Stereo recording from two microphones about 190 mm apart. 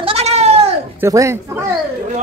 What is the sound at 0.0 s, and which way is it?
Goat, 35° right (ahead or behind).